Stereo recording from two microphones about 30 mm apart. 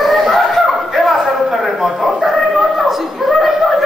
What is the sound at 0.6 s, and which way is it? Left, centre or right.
Dog, centre.